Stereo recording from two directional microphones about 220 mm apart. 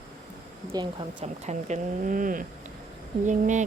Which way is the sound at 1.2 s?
30° right (ahead or behind).